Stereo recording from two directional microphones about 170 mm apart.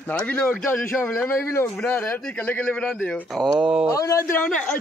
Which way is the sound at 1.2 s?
15° left (ahead or behind).